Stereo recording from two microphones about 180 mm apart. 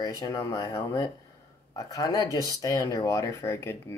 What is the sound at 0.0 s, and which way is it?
Speech, 20° left (ahead or behind).